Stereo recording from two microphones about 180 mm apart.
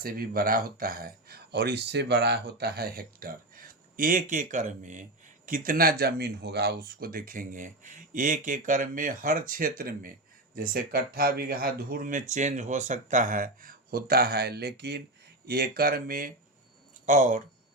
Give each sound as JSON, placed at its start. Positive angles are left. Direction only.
{"t": 0.0, "sound": "speech", "side_deg": -55}